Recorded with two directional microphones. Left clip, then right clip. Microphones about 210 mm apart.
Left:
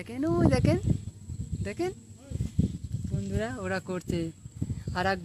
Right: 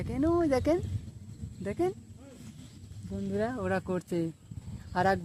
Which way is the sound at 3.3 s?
15° right (ahead or behind).